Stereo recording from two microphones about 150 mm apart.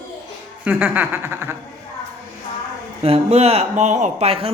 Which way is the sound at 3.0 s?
45° right (ahead or behind).